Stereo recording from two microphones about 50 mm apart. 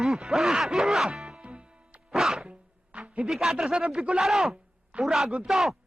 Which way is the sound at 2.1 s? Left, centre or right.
Centre.